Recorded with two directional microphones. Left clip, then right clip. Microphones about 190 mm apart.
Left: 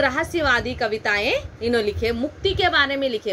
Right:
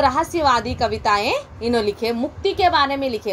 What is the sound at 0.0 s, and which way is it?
A woman's voice, 5° right (ahead or behind).